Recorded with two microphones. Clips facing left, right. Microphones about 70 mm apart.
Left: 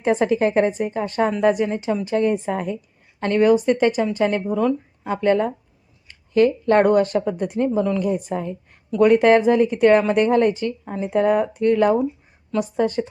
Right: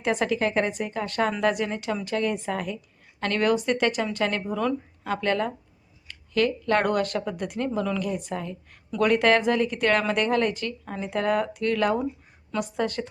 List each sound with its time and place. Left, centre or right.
0.0 s speech: left